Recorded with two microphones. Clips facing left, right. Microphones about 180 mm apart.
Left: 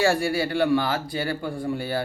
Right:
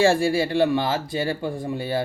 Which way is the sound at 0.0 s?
25° right (ahead or behind).